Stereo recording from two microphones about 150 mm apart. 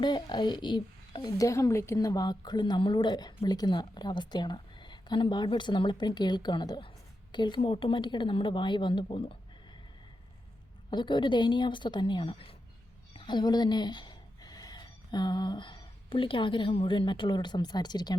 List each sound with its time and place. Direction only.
0.0 s a woman's voice: 30° left (ahead or behind)
10.9 s speech: 30° left (ahead or behind)